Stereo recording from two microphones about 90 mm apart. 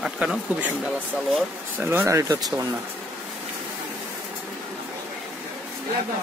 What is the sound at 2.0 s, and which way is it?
Speech, 35° right (ahead or behind).